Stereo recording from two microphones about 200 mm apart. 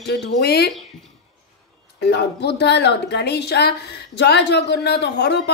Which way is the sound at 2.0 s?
55° left (ahead or behind).